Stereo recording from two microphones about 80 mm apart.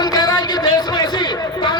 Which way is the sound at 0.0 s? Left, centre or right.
Left.